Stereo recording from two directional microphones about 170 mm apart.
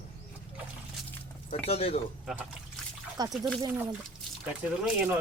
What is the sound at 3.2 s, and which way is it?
Speech, 25° right (ahead or behind).